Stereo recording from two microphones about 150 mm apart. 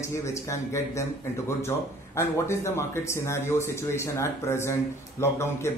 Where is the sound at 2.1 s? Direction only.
20° left (ahead or behind).